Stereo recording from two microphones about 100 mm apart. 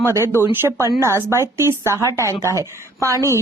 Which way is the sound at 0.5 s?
20° right (ahead or behind).